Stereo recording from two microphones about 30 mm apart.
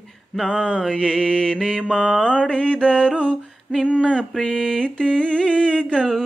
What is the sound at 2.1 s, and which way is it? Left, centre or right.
Mantra, right.